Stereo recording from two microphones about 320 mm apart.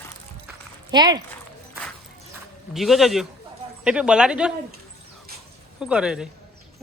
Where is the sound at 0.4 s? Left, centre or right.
Centre.